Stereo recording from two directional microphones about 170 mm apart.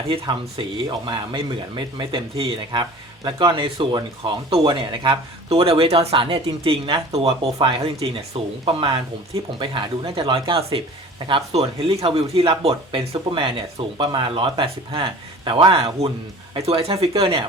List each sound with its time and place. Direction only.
0.1 s speech: 30° right (ahead or behind)